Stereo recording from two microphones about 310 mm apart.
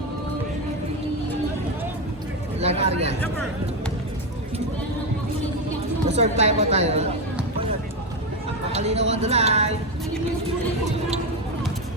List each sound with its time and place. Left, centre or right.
2.6 s a sound: centre
6.1 s speech: right
8.7 s speech: centre